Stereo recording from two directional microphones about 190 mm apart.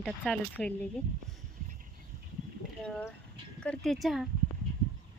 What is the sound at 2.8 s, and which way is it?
Speech, 5° left (ahead or behind).